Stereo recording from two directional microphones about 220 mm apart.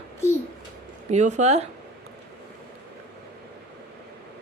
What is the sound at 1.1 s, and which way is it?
Speech, 30° right (ahead or behind).